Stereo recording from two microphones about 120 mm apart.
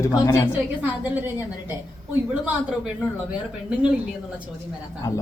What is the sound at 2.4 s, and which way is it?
Speech, 10° right (ahead or behind).